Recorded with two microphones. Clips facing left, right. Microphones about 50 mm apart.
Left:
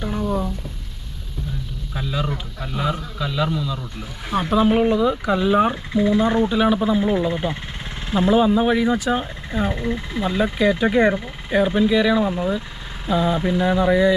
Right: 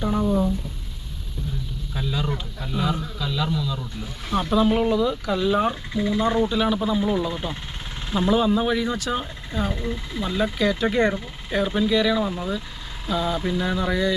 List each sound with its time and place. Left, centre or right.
1.9 s speech: centre
9.7 s speech: left